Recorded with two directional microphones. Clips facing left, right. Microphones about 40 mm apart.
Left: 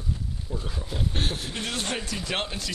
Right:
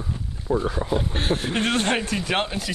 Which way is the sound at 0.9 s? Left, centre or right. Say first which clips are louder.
Right 3 dB; centre.